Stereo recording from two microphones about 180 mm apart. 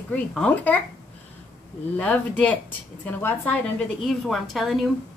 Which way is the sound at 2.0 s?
5° left (ahead or behind).